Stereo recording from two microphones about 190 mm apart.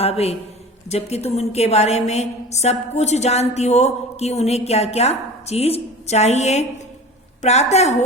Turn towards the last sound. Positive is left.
turn(degrees=35)  # may be behind; listen again after turning